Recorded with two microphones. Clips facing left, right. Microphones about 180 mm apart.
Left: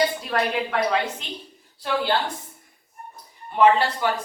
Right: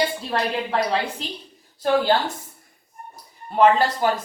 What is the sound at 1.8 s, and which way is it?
Speech, 45° right (ahead or behind).